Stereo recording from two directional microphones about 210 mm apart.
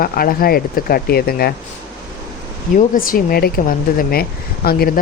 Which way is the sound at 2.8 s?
45° left (ahead or behind).